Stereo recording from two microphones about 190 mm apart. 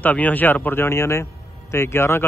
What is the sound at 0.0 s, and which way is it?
Speech, 10° left (ahead or behind).